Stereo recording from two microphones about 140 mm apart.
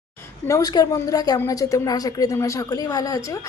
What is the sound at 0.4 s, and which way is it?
A woman's voice, 25° left (ahead or behind).